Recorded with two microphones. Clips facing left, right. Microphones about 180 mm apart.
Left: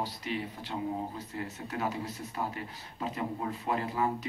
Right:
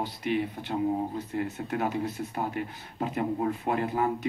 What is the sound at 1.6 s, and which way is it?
Speech, 55° right (ahead or behind).